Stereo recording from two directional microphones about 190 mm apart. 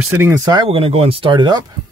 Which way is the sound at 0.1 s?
15° right (ahead or behind).